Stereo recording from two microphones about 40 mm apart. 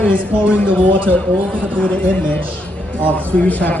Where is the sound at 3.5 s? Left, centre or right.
Left.